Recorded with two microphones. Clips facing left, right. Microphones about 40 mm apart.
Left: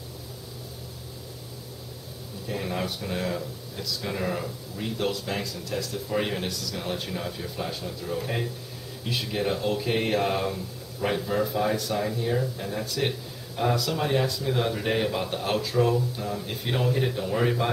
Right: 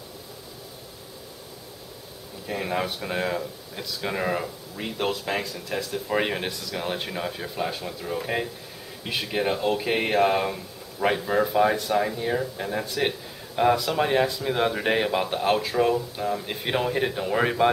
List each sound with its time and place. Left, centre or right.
2.4 s speech: right